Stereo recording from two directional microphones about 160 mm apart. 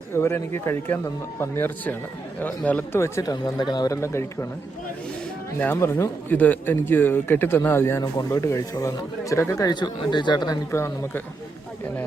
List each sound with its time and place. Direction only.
0.2 s speech: 15° left (ahead or behind)
5.5 s speech: 15° left (ahead or behind)